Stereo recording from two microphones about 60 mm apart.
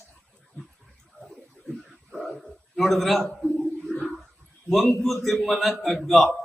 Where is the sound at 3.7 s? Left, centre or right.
Centre.